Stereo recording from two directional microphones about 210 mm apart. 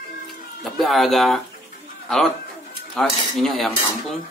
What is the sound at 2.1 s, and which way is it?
Cutlery, centre (ahead or behind).